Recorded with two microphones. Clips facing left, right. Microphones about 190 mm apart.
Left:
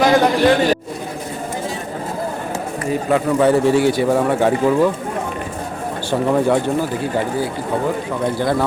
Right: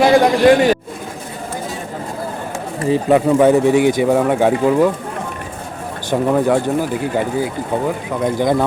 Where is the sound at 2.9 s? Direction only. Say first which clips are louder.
Right 4 dB; 20° right (ahead or behind).